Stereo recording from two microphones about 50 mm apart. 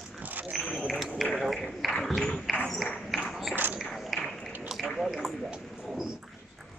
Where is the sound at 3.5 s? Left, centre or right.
Right.